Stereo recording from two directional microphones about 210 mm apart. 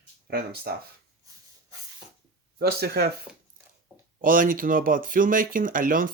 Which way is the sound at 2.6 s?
45° right (ahead or behind).